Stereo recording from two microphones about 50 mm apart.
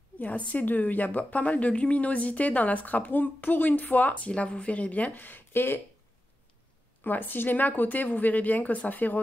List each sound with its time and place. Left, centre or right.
0.2 s a woman's voice: left
7.0 s a woman's voice: left